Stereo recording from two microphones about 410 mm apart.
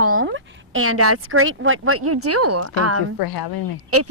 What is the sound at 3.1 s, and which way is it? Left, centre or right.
Speech, left.